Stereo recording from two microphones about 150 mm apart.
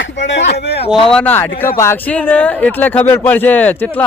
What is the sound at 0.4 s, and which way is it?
Speech, 90° left.